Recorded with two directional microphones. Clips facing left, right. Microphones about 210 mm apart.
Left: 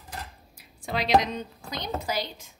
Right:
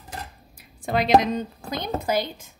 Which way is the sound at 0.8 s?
50° right (ahead or behind).